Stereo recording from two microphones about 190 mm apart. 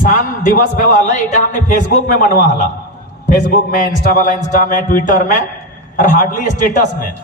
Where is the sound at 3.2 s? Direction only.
45° left (ahead or behind).